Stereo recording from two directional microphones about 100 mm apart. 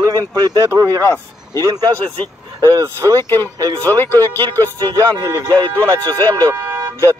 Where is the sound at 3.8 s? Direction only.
20° left (ahead or behind).